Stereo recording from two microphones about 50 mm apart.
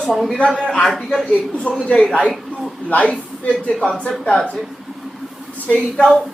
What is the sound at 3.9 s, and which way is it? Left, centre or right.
Speech, centre.